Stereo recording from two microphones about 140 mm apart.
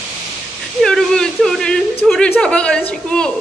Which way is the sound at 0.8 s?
5° left (ahead or behind).